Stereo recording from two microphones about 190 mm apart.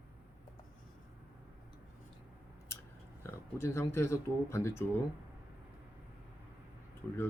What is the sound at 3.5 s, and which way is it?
Speech, 15° left (ahead or behind).